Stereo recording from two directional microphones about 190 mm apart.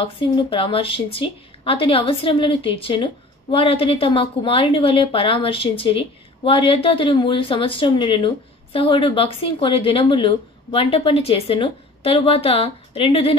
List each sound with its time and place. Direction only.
0.0 s a woman's voice: 30° left (ahead or behind)